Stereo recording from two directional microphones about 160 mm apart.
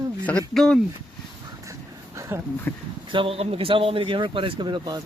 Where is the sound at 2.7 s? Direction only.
10° left (ahead or behind).